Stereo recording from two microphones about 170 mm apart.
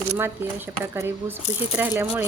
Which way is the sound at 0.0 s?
15° right (ahead or behind).